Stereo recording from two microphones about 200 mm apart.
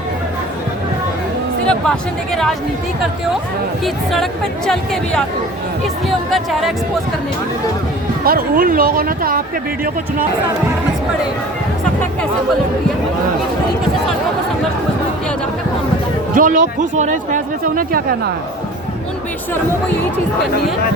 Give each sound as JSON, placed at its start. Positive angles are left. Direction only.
{"t": 1.6, "sound": "speech", "side_deg": 0}
{"t": 3.8, "sound": "speech", "side_deg": 0}
{"t": 8.2, "sound": "speech", "side_deg": -45}
{"t": 16.3, "sound": "speech", "side_deg": -40}